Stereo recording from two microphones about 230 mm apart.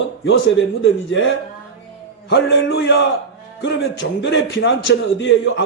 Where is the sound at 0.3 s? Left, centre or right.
Left.